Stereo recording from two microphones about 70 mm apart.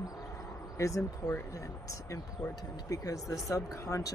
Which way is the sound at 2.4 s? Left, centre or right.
Left.